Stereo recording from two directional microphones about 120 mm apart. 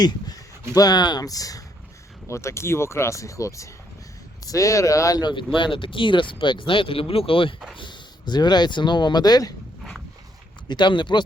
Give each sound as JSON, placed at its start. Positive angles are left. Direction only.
{"t": 0.7, "sound": "speech", "side_deg": 35}
{"t": 10.7, "sound": "speech", "side_deg": 40}